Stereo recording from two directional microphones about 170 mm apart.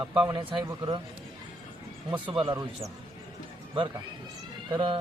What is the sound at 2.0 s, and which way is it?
Speech, 30° right (ahead or behind).